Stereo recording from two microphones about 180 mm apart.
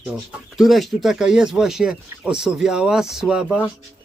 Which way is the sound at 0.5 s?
Centre (ahead or behind).